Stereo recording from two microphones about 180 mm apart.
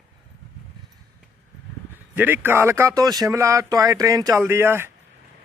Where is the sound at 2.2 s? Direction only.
10° right (ahead or behind).